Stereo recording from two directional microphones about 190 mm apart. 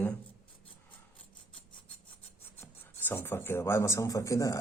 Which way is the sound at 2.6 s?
10° left (ahead or behind).